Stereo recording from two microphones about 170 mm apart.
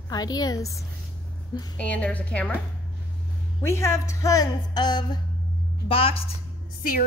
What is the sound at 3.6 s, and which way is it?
A woman's voice, 15° left (ahead or behind).